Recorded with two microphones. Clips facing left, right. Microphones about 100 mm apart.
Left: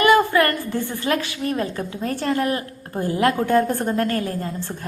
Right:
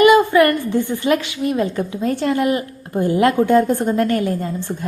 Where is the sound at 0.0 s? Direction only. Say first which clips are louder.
Right 5 dB; 15° right (ahead or behind).